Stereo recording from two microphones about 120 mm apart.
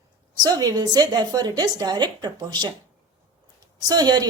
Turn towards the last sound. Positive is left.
turn(degrees=-35)  # may be behind; listen again after turning